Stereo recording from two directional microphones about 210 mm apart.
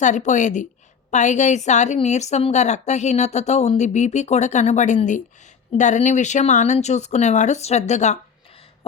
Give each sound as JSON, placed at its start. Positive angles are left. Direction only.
{"t": 0.0, "sound": "a woman's voice", "side_deg": 35}